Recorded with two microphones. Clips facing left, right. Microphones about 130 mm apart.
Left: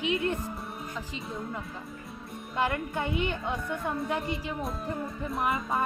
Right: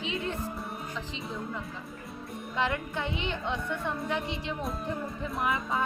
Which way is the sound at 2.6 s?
Centre (ahead or behind).